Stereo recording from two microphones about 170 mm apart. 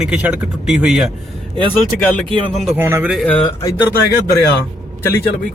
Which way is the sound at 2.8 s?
15° right (ahead or behind).